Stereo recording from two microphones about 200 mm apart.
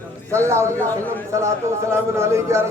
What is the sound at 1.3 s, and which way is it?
A man's voice, 15° right (ahead or behind).